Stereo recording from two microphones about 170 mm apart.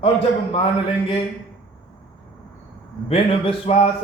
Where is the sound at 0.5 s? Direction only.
30° left (ahead or behind).